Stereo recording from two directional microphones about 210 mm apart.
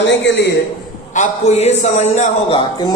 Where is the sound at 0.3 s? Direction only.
55° left (ahead or behind).